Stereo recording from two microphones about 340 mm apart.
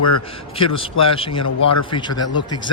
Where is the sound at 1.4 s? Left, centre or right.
Left.